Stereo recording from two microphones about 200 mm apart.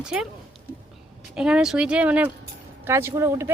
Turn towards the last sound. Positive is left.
turn(degrees=-15)  # may be behind; listen again after turning